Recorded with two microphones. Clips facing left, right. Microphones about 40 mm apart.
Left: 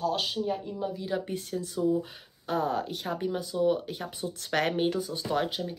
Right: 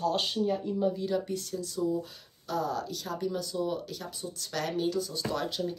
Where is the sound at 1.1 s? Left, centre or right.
Left.